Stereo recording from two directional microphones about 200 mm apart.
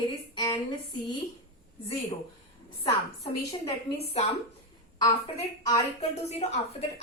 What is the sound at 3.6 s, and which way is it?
Speech, 30° left (ahead or behind).